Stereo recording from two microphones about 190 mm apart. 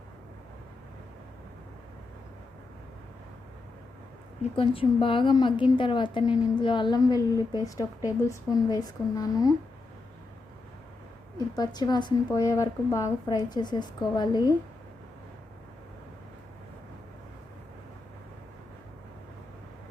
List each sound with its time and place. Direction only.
4.5 s a woman's voice: 30° left (ahead or behind)
11.3 s a woman's voice: 20° left (ahead or behind)